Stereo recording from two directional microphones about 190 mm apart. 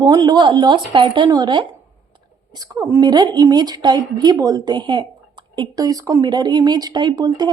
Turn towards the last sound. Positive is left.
turn(degrees=-20)  # may be behind; listen again after turning